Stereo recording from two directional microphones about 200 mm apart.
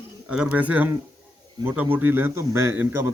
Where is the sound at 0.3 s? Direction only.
5° right (ahead or behind).